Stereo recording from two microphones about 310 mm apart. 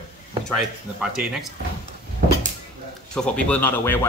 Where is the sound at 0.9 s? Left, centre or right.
Centre.